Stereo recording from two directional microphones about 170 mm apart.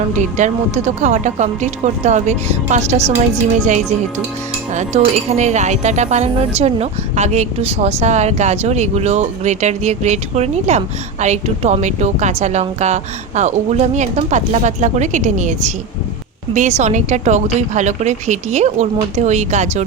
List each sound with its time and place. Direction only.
0.1 s speech: 45° right (ahead or behind)
4.7 s speech: 45° right (ahead or behind)